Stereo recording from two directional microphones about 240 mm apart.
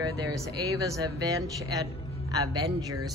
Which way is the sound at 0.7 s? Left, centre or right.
Centre.